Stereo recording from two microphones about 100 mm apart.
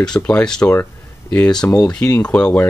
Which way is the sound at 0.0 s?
10° left (ahead or behind).